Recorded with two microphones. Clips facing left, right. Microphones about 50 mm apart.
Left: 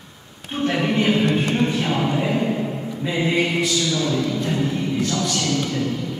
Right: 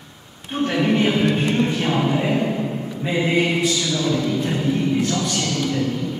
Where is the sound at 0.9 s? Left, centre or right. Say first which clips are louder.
Even; right.